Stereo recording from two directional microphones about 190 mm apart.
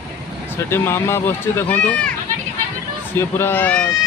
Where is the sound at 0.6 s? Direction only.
15° left (ahead or behind).